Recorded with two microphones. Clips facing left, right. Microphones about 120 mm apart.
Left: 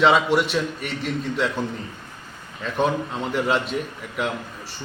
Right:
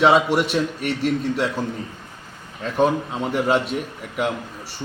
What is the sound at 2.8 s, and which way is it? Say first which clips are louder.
Speech: right 3 dB; 5° right (ahead or behind).